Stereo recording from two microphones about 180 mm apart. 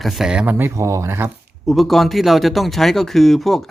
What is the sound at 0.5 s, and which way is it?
Speech, 15° right (ahead or behind).